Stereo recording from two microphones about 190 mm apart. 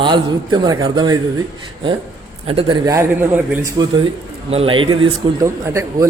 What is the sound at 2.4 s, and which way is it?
Speech, 30° right (ahead or behind).